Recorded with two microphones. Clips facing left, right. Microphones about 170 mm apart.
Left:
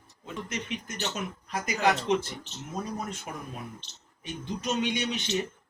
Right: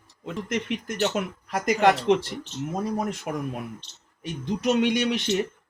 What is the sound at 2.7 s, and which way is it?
Speech, 60° right (ahead or behind).